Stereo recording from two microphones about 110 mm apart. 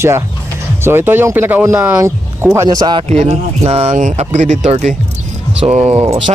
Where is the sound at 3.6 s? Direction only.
75° right (ahead or behind); by 4.9 s 90° right.